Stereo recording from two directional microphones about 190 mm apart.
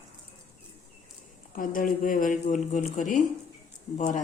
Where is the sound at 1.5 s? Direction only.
45° left (ahead or behind).